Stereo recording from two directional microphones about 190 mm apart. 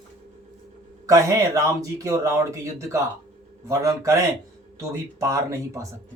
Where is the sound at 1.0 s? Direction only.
15° right (ahead or behind).